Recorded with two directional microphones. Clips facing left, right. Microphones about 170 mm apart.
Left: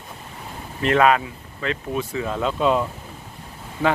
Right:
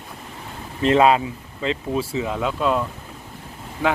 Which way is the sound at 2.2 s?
15° right (ahead or behind).